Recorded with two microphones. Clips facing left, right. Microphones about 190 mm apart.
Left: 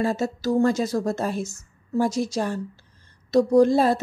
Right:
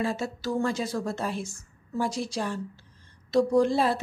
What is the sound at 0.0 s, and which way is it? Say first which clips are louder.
A woman's voice: left 5 dB; 40° left (ahead or behind).